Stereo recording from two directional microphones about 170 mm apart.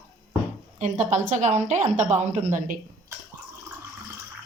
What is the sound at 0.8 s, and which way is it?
A woman's voice, 45° right (ahead or behind).